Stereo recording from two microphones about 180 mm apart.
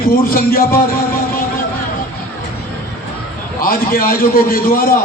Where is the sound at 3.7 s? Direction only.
55° left (ahead or behind).